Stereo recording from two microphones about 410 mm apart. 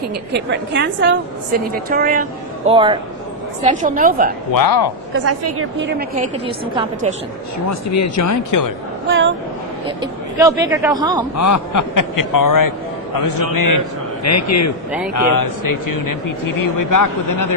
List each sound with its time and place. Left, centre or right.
0.3 s a woman's voice: right
4.5 s speech: left
5.1 s a woman's voice: right; by 7.1 s centre
7.7 s speech: left
9.0 s a woman's voice: right
10.0 s speech: centre
11.3 s a man's voice: left